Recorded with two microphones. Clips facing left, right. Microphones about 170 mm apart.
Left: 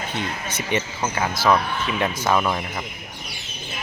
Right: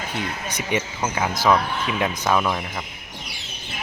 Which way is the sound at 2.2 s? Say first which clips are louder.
Left 1 dB; 5° left (ahead or behind).